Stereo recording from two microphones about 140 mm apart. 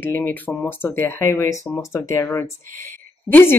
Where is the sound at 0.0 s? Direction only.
15° left (ahead or behind).